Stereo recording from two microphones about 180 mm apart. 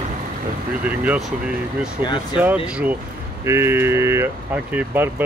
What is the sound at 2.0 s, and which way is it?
Speech, 25° left (ahead or behind).